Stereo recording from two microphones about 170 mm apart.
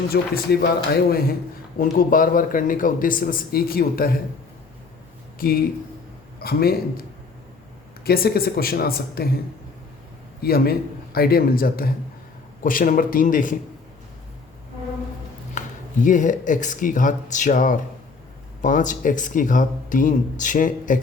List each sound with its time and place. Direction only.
0.1 s a man's voice: 65° left (ahead or behind)
5.4 s a man's voice: 60° left (ahead or behind)
8.0 s a man's voice: 65° left (ahead or behind)
10.4 s a man's voice: 65° left (ahead or behind)
15.6 s a sound: 45° left (ahead or behind)
16.0 s speech: 50° left (ahead or behind)